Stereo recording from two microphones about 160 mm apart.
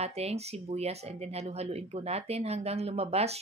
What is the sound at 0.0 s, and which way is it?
Speech, 40° right (ahead or behind).